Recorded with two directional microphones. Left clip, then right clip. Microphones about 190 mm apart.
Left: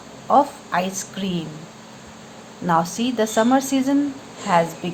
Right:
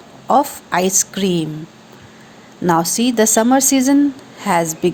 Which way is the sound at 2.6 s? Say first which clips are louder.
Right 4 dB; 45° right (ahead or behind).